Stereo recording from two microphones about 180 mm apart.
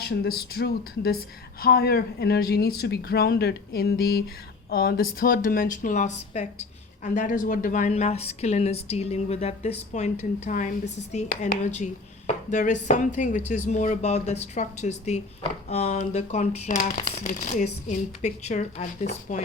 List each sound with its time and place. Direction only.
0.0 s a woman's voice: 60° left (ahead or behind); by 19.4 s 45° left (ahead or behind)